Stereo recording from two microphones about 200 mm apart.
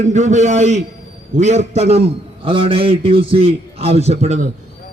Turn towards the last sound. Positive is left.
turn(degrees=-35)  # may be behind; listen again after turning